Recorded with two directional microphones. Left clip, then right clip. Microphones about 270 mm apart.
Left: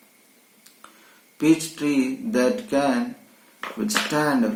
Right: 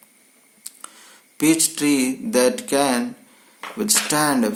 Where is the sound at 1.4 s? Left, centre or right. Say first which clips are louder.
Right 2 dB; right.